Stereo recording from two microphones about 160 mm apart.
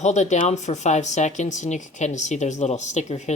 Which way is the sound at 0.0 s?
45° left (ahead or behind).